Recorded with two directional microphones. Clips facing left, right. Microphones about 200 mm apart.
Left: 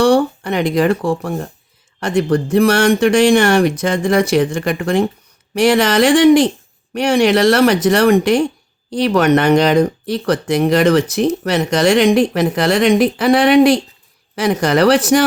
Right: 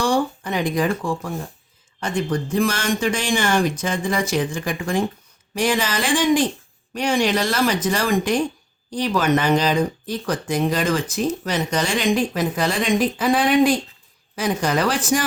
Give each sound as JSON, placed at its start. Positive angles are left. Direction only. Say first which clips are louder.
{"t": 0.0, "sound": "speech", "louder": "left 8 dB", "side_deg": 70}